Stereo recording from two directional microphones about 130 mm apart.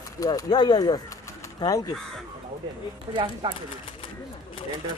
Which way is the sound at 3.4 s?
35° right (ahead or behind).